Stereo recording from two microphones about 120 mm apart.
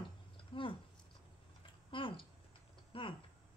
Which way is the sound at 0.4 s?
45° left (ahead or behind).